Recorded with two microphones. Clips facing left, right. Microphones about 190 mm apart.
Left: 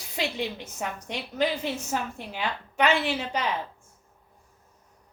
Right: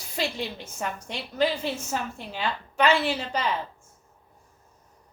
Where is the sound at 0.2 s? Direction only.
15° left (ahead or behind).